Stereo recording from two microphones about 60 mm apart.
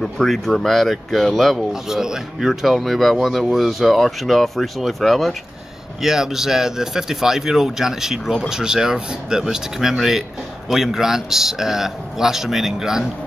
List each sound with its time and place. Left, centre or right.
0.0 s speech: centre
1.7 s speech: centre